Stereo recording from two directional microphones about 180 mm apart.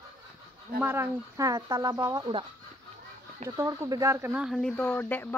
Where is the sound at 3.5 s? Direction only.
20° right (ahead or behind); by 5.3 s 10° left (ahead or behind).